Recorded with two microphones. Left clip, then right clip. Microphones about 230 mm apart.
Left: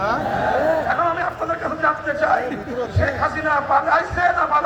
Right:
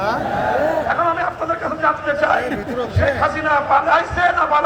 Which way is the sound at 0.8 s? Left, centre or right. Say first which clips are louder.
Right 2 dB; right.